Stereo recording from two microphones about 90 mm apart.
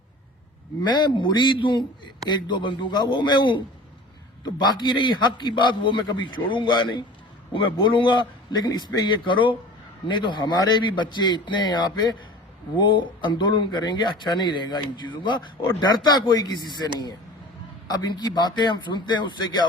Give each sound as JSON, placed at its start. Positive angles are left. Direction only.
{"t": 0.9, "sound": "speech", "side_deg": 55}
{"t": 9.0, "sound": "speech", "side_deg": 65}